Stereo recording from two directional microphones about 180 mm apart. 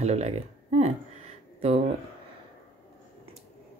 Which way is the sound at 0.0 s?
35° right (ahead or behind).